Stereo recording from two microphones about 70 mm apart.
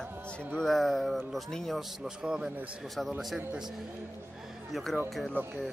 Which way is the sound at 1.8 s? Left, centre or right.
Centre.